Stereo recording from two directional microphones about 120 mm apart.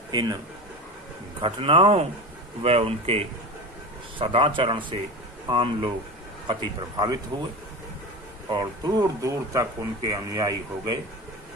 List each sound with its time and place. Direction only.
0.1 s a man's voice: 35° right (ahead or behind)
1.4 s a man's voice: 50° right (ahead or behind)
8.5 s speech: 35° right (ahead or behind)